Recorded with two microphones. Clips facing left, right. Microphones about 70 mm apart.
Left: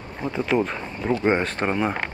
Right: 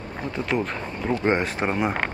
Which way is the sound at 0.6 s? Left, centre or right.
Centre.